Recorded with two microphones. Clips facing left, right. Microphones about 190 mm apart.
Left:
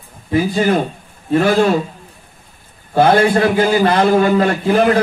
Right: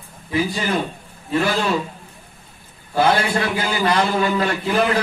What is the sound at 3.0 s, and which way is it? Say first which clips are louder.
Speech: left 6 dB; 50° left (ahead or behind).